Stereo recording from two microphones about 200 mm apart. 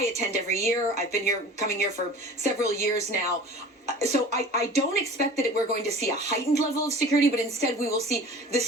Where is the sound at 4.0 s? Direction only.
35° right (ahead or behind).